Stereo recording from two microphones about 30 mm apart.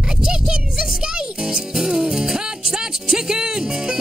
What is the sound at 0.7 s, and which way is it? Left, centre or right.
Speech, right.